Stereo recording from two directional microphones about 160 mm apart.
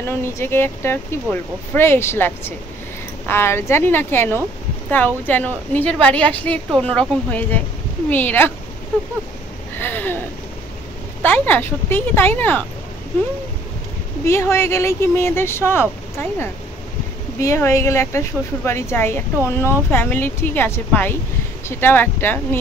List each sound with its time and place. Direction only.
0.0 s speech: 15° left (ahead or behind)
9.8 s a sound: 10° left (ahead or behind)
11.2 s speech: 10° left (ahead or behind)
14.2 s speech: 15° left (ahead or behind)